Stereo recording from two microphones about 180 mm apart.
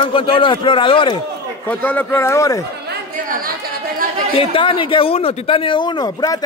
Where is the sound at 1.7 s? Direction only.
10° left (ahead or behind).